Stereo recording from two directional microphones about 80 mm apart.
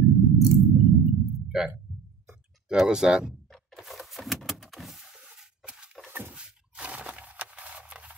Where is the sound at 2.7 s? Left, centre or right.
Centre.